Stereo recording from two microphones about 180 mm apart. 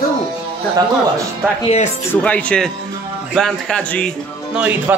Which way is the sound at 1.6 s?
35° left (ahead or behind).